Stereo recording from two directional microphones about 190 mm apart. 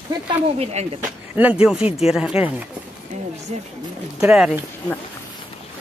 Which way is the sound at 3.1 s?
40° right (ahead or behind).